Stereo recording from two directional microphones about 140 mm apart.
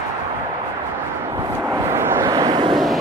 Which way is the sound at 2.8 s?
Centre (ahead or behind).